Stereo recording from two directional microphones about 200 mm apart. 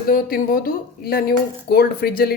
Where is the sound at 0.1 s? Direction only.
45° left (ahead or behind).